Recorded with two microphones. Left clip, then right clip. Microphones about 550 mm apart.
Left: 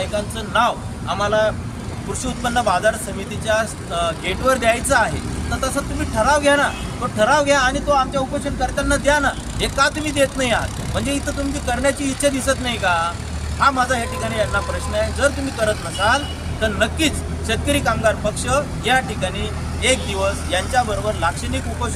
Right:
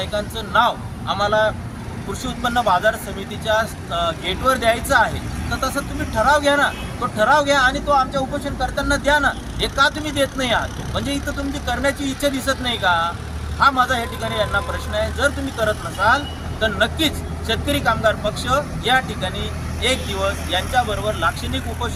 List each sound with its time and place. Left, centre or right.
0.0 s speech: right
20.5 s speech: right